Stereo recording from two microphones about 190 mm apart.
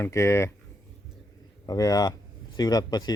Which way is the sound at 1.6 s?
20° left (ahead or behind).